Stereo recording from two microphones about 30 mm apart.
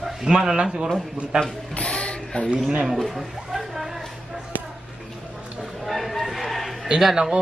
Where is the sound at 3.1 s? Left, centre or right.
Centre.